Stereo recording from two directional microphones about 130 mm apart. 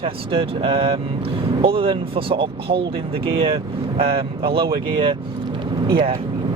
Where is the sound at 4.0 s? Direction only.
45° right (ahead or behind).